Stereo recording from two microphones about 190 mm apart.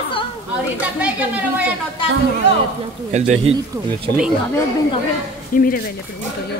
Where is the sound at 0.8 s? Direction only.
10° right (ahead or behind).